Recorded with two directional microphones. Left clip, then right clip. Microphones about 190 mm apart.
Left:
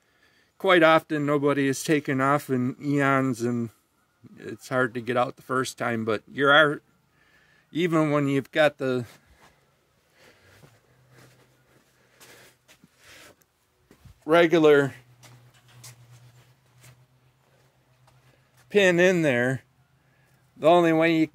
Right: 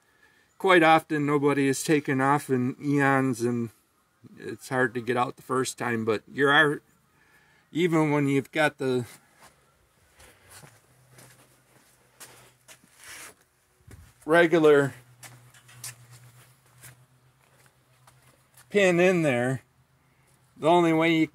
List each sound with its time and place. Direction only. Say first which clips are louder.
0.6 s speech: left 1 dB; 10° left (ahead or behind)
10.1 s a sound: even; 20° left (ahead or behind)
14.2 s speech: left 1 dB; 10° left (ahead or behind)
18.7 s speech: left 2 dB; 10° left (ahead or behind)